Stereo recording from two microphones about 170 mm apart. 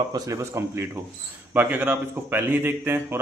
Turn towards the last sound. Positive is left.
turn(degrees=-15)  # may be behind; listen again after turning